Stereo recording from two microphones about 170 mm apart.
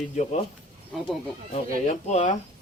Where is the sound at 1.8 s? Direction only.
45° left (ahead or behind).